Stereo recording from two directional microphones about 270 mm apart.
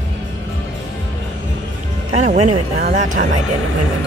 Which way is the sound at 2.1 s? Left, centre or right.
Right.